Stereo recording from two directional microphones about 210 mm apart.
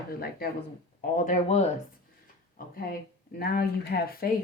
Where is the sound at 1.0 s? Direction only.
35° left (ahead or behind).